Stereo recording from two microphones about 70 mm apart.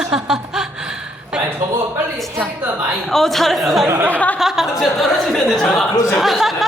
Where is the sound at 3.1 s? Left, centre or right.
Centre.